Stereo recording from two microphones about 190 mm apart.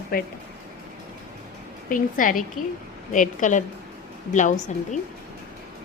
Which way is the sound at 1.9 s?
45° left (ahead or behind).